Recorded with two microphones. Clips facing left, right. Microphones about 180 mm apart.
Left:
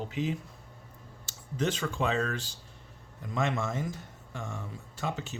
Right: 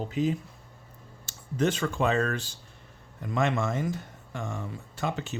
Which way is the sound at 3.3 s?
70° right (ahead or behind).